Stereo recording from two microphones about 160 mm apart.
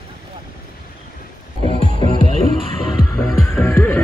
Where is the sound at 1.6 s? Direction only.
40° left (ahead or behind).